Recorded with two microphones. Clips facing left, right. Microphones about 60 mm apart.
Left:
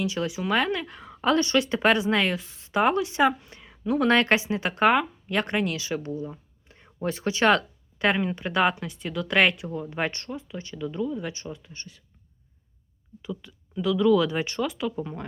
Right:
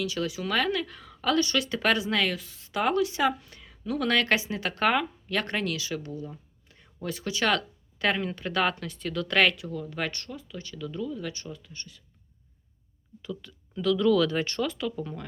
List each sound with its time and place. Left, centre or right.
0.0 s a woman's voice: left
13.2 s speech: centre